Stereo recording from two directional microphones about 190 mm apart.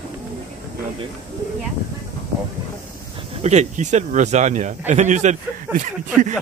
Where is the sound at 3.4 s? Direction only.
35° right (ahead or behind).